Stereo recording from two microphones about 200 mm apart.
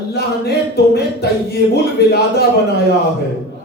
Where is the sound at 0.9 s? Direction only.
55° left (ahead or behind).